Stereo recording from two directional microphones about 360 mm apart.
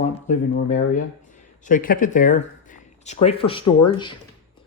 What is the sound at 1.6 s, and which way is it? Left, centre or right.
Speech, left.